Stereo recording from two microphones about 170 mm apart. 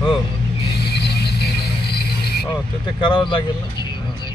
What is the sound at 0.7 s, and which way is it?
Vehicle, 70° left (ahead or behind).